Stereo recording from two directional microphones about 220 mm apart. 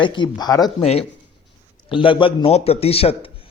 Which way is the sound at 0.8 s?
30° left (ahead or behind).